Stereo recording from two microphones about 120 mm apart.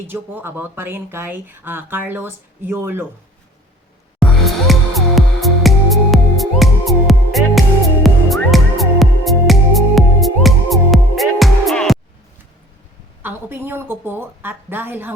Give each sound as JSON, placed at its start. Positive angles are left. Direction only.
{"t": 0.1, "sound": "speech", "side_deg": -15}
{"t": 4.2, "sound": "music", "side_deg": 0}
{"t": 13.2, "sound": "speech", "side_deg": -15}